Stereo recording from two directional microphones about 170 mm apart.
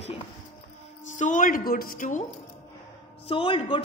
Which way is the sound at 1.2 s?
50° left (ahead or behind).